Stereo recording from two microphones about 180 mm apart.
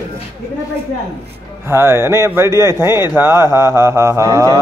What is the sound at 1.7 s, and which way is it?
Speech, 15° right (ahead or behind).